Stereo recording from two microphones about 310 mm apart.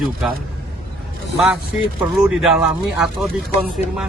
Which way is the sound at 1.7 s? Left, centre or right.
Centre.